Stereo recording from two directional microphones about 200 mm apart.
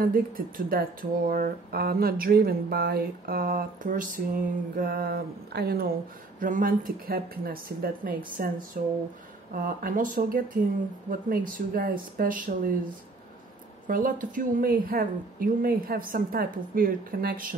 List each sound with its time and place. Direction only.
0.0 s speech: 45° right (ahead or behind)
13.8 s speech: 45° right (ahead or behind)